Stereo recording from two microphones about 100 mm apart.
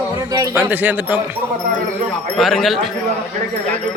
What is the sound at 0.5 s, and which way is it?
Speech, 15° right (ahead or behind).